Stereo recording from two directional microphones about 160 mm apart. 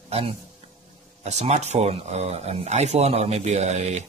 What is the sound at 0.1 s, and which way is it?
A man's voice, 35° right (ahead or behind).